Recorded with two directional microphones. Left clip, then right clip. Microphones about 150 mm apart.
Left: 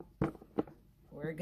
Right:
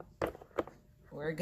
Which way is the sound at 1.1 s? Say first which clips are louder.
Right 4 dB; 10° right (ahead or behind).